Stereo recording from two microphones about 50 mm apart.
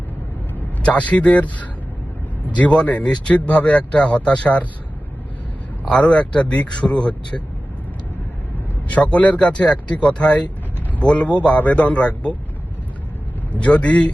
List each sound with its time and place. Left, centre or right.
0.8 s a man's voice: left
5.9 s a man's voice: left
9.0 s a man's voice: left
13.5 s a man's voice: left